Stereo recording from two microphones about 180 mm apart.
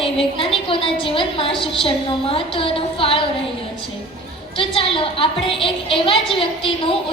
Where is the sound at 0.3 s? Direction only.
30° left (ahead or behind).